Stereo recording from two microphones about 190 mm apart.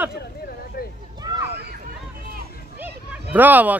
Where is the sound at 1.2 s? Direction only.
20° right (ahead or behind).